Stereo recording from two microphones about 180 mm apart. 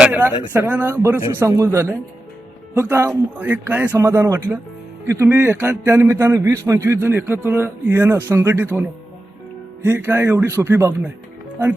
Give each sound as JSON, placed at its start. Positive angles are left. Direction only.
{"t": 0.0, "sound": "a man's voice", "side_deg": -10}
{"t": 9.8, "sound": "a man's voice", "side_deg": -10}